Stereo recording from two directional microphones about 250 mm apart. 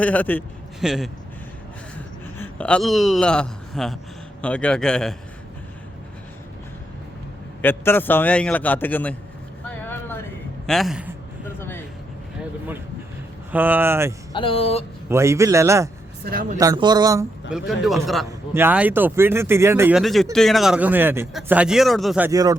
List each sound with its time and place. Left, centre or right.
0.0 s speech: centre
2.0 s a sound: centre
4.4 s speech: centre
7.6 s a man's voice: centre
9.6 s vehicle: centre
10.7 s speech: centre
13.5 s speech: centre
14.3 s speech: left
15.1 s speech: centre
16.2 s speech: right
16.6 s speech: centre
17.5 s speech: centre